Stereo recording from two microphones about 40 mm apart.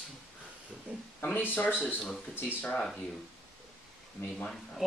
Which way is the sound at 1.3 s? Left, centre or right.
Left.